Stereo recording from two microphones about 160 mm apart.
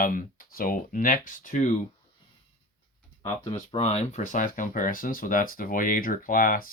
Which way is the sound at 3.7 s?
40° left (ahead or behind).